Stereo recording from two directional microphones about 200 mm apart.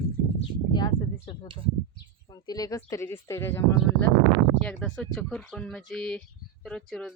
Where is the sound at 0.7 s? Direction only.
20° left (ahead or behind).